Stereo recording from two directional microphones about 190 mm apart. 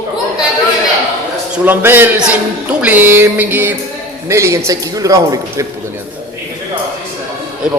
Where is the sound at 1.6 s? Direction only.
10° right (ahead or behind).